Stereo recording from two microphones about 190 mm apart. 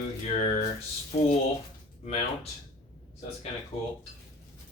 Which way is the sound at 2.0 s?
35° left (ahead or behind).